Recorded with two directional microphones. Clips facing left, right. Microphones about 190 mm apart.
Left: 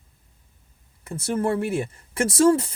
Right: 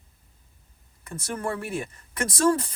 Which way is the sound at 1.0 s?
30° left (ahead or behind).